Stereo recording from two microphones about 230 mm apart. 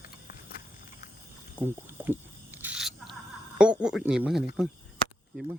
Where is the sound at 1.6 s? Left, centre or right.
Centre.